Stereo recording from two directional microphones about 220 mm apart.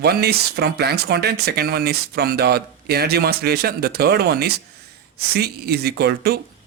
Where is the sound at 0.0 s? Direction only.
45° right (ahead or behind).